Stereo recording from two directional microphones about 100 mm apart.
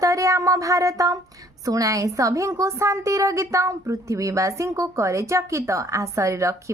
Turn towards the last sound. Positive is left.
turn(degrees=-30)  # may be behind; listen again after turning